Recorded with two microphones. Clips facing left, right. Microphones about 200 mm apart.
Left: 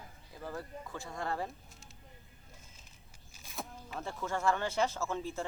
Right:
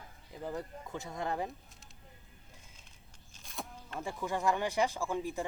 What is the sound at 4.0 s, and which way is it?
Speech, 15° right (ahead or behind).